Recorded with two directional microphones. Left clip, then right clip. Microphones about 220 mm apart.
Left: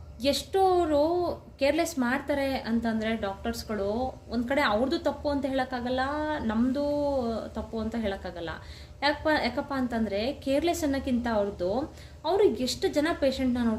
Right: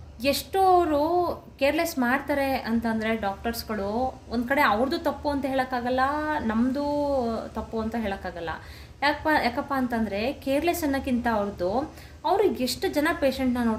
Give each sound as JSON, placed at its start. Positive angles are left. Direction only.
{"t": 0.2, "sound": "a child's voice", "side_deg": -5}